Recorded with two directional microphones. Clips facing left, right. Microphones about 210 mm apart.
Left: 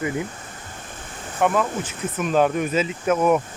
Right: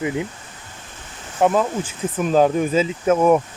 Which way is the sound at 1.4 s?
30° right (ahead or behind).